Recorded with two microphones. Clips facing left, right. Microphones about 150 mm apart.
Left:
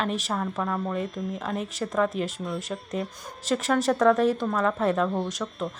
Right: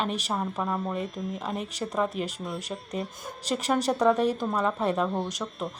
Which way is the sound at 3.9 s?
15° right (ahead or behind).